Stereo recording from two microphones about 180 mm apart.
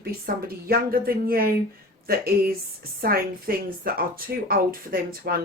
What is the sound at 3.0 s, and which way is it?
Speech, 55° right (ahead or behind).